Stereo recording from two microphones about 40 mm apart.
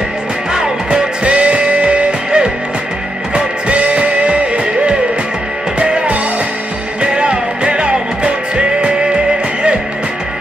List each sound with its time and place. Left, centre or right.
0.8 s music: right
5.8 s music: right